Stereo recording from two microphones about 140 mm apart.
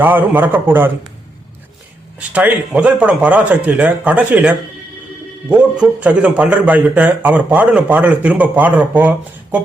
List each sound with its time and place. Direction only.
0.0 s a man's voice: 15° right (ahead or behind)
2.1 s a man's voice: 10° right (ahead or behind)